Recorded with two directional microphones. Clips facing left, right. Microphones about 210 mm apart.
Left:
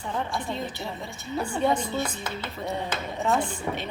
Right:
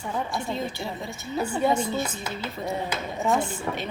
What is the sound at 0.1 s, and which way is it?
A woman's voice, 10° right (ahead or behind).